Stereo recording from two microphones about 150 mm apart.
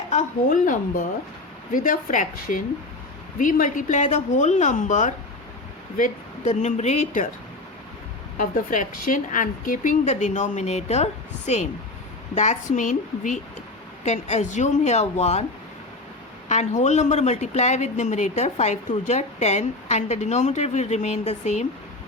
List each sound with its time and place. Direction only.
0.1 s a woman's voice: 55° left (ahead or behind)
8.4 s a woman's voice: 60° left (ahead or behind)
16.5 s speech: 50° left (ahead or behind)